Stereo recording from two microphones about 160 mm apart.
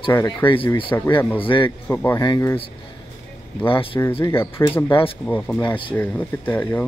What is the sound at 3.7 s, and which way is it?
Speech, 35° left (ahead or behind).